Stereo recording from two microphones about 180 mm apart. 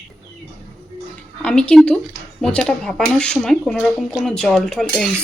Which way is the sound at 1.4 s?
5° left (ahead or behind).